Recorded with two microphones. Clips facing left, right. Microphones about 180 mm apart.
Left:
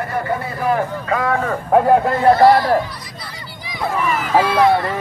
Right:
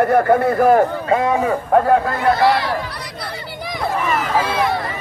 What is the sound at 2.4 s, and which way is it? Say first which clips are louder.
Speech: left 5 dB; 75° right (ahead or behind).